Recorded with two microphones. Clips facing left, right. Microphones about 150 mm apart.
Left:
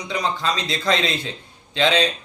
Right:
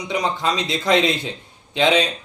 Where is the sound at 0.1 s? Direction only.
20° right (ahead or behind).